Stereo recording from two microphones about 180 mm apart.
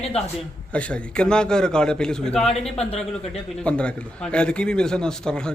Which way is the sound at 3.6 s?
5° left (ahead or behind).